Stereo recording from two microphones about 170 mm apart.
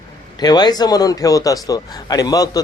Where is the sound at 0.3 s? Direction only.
25° left (ahead or behind).